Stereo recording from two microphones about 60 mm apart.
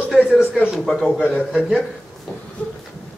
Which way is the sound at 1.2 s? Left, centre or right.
Left.